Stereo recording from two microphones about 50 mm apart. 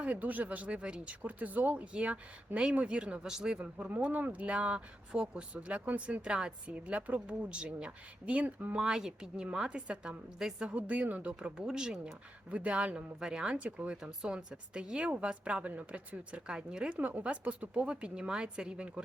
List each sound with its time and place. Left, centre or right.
0.0 s speech: right
1.2 s a woman's voice: right; by 3.6 s centre
3.6 s a woman's voice: right
6.7 s speech: right
8.8 s a woman's voice: centre
10.7 s speech: right
11.3 s a woman's voice: centre
17.0 s speech: right